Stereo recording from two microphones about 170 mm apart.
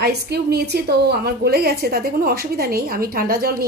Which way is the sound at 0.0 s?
70° right (ahead or behind).